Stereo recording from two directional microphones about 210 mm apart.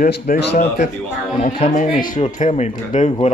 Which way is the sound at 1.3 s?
25° left (ahead or behind).